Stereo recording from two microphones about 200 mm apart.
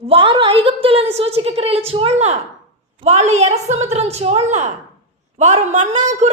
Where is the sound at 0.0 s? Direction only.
30° right (ahead or behind).